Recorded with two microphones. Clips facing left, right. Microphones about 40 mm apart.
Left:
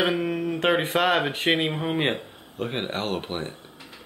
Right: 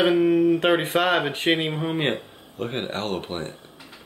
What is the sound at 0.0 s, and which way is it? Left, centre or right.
Speech, centre.